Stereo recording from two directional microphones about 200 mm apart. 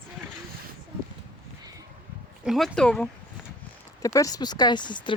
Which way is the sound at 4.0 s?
15° left (ahead or behind).